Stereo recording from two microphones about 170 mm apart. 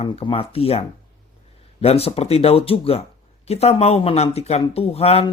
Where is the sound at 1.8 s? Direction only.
35° left (ahead or behind).